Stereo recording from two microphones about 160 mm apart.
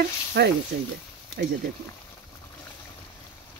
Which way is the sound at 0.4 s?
90° right.